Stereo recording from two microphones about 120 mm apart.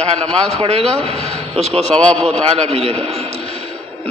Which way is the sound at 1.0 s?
55° right (ahead or behind).